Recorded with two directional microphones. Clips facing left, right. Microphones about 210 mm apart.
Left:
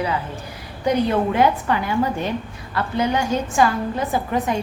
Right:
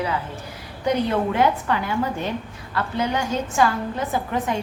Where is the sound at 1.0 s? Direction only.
15° left (ahead or behind).